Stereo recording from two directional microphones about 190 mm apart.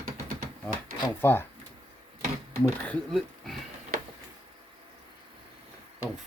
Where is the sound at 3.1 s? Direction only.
Centre (ahead or behind).